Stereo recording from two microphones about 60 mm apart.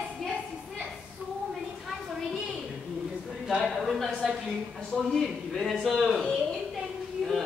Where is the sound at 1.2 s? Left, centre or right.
Right.